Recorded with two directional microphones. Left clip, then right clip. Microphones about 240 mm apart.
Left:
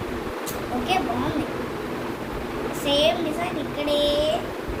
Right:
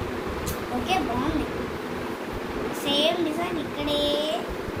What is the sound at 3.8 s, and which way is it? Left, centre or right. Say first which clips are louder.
Speech: left 3 dB; left.